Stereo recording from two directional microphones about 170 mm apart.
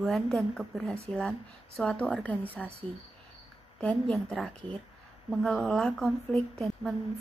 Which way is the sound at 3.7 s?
5° left (ahead or behind).